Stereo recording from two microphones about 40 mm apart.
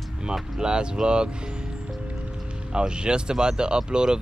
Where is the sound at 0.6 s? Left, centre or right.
Right.